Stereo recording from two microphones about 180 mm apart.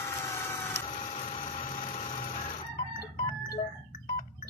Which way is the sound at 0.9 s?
40° left (ahead or behind).